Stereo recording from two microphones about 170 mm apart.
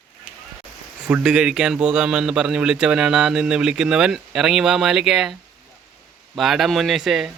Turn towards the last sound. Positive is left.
turn(degrees=0)  # may be behind; listen again after turning